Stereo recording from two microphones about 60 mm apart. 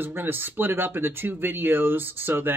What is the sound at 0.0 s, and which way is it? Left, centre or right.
Speech, right.